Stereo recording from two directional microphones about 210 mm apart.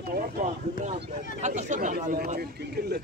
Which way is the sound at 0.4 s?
30° right (ahead or behind).